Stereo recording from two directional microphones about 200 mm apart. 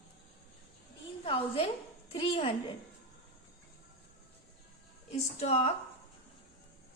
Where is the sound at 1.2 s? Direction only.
25° left (ahead or behind).